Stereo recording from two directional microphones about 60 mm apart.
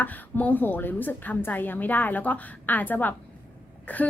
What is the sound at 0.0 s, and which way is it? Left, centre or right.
A woman's voice, left.